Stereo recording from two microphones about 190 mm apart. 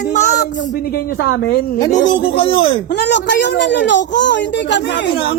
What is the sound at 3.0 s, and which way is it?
Speech, 65° left (ahead or behind).